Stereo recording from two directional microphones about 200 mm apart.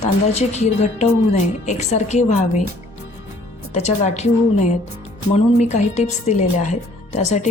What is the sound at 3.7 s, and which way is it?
Speech, 35° left (ahead or behind).